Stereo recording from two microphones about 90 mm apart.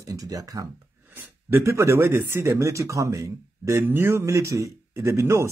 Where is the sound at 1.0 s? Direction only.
25° right (ahead or behind).